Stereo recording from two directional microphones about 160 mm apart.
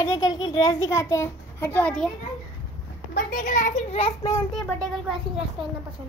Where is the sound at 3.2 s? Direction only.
55° left (ahead or behind).